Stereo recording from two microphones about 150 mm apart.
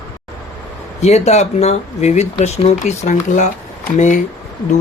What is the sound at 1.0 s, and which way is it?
Speech, 50° left (ahead or behind).